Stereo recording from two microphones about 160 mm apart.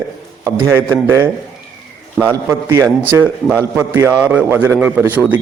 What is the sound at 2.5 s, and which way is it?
Speech, 15° right (ahead or behind).